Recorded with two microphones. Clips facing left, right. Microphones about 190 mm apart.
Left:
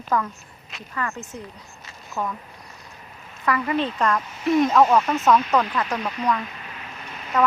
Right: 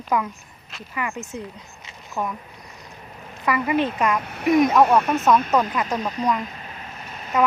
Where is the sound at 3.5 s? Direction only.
10° right (ahead or behind).